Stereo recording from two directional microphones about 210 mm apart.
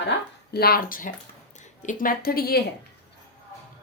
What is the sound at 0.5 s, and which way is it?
Speech, 45° left (ahead or behind).